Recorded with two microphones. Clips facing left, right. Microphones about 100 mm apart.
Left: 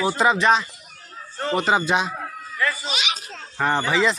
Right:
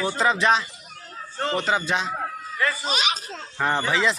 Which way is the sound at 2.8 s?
40° right (ahead or behind).